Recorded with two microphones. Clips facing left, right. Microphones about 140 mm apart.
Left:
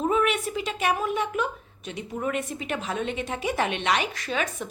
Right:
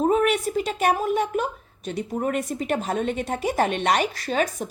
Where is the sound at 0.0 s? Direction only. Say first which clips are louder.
Right 4 dB; 40° right (ahead or behind).